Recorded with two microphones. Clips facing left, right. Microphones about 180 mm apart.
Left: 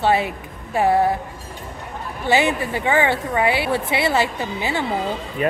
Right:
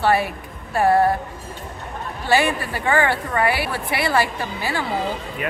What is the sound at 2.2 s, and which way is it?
A woman's voice, 20° left (ahead or behind).